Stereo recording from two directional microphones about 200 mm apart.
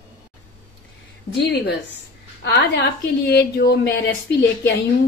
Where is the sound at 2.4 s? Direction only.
60° left (ahead or behind).